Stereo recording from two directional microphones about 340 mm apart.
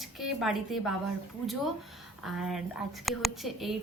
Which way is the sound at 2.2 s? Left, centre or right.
Centre.